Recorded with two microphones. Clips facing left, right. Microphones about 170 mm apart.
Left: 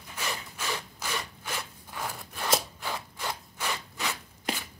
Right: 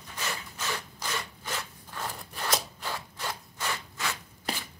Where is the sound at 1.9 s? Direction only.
10° left (ahead or behind).